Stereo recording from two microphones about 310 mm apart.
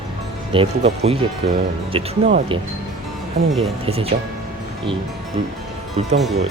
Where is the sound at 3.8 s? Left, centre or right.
Centre.